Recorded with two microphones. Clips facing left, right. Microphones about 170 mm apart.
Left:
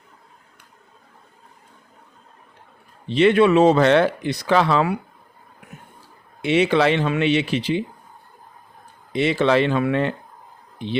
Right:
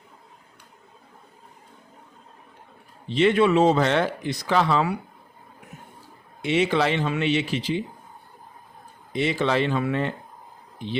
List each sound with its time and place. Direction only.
3.1 s speech: 70° left (ahead or behind)
6.4 s speech: 70° left (ahead or behind)
9.1 s speech: 75° left (ahead or behind)